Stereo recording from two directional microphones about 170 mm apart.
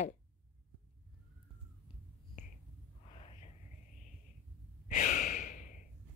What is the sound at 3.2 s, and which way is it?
Whispering, 35° left (ahead or behind).